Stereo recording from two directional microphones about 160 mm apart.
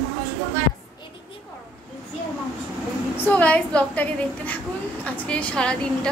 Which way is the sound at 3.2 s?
10° left (ahead or behind).